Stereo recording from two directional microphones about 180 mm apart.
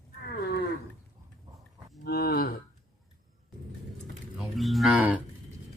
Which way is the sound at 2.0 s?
60° left (ahead or behind).